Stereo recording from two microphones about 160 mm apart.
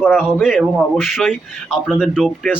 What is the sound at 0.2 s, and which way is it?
A man's voice, centre (ahead or behind).